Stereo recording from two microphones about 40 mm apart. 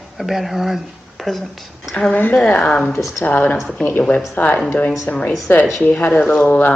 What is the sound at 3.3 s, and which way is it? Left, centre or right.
Speech, left.